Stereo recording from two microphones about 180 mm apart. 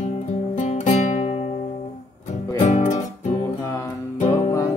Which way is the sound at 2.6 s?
40° left (ahead or behind).